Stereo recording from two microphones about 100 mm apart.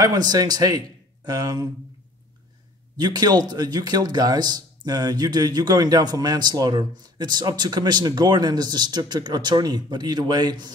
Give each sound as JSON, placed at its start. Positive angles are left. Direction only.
{"t": 0.0, "sound": "a man's voice", "side_deg": -40}
{"t": 3.0, "sound": "a man's voice", "side_deg": -45}